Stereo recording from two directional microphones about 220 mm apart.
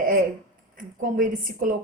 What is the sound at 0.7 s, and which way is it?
Speech, 40° right (ahead or behind).